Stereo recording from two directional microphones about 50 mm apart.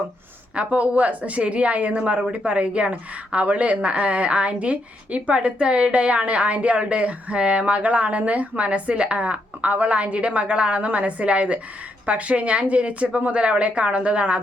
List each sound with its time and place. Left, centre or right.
0.5 s speech: right